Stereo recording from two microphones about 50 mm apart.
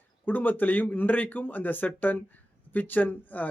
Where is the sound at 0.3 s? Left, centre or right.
Left.